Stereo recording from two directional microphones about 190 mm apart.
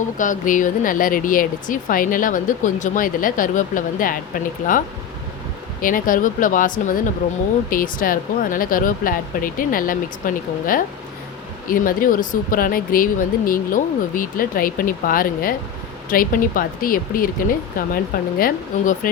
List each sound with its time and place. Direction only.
0.2 s speech: 45° left (ahead or behind)
5.8 s speech: 45° left (ahead or behind)